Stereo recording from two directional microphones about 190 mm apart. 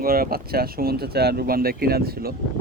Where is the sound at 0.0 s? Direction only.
50° right (ahead or behind).